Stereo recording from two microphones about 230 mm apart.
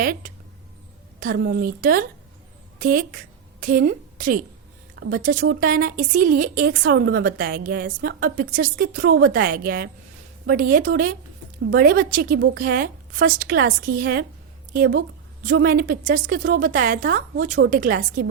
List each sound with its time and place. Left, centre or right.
0.0 s a woman's voice: right